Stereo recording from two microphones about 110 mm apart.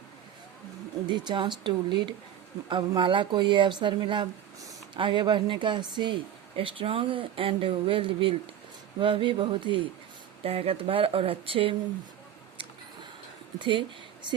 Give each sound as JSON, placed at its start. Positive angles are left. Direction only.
{"t": 1.0, "sound": "speech", "side_deg": -40}
{"t": 6.6, "sound": "speech", "side_deg": -55}
{"t": 10.4, "sound": "speech", "side_deg": -65}
{"t": 13.6, "sound": "speech", "side_deg": -45}